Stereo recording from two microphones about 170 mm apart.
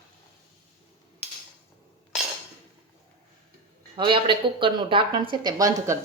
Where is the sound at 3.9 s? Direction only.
30° right (ahead or behind).